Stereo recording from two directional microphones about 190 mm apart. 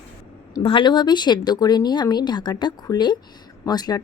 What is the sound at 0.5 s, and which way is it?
Speech, 25° left (ahead or behind).